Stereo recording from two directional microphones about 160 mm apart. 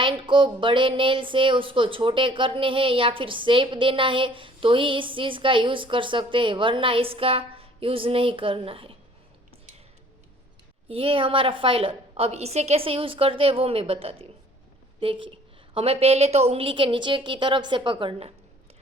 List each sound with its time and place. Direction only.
0.0 s speech: 30° right (ahead or behind)
10.8 s speech: 35° right (ahead or behind)